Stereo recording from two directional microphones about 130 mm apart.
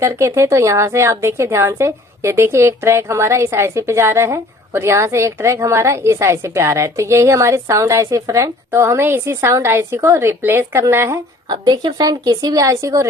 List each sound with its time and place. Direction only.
0.3 s a woman's voice: 20° right (ahead or behind)
11.4 s a woman's voice: 30° right (ahead or behind)